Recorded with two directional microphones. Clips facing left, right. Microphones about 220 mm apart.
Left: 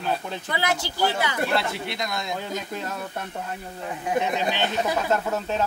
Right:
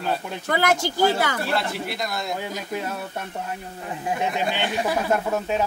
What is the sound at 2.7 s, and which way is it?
Snicker, 10° right (ahead or behind).